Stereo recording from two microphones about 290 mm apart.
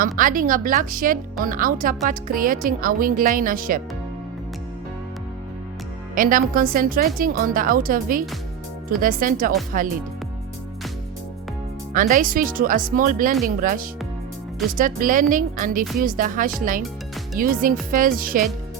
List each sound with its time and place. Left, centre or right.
0.0 s speech: right
6.1 s speech: right
11.9 s speech: right